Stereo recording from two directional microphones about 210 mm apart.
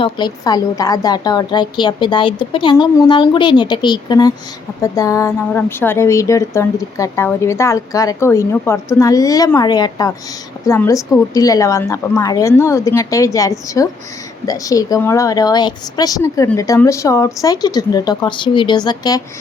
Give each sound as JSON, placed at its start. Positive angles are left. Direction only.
{"t": 0.0, "sound": "a woman's voice", "side_deg": 20}